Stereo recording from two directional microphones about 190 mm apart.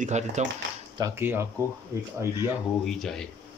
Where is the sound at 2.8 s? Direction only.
Centre (ahead or behind).